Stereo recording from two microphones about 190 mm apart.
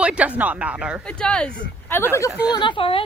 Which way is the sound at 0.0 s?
5° right (ahead or behind).